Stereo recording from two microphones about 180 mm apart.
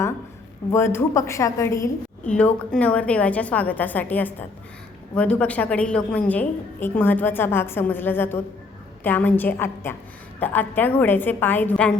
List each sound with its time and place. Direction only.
0.7 s a woman's voice: 15° left (ahead or behind)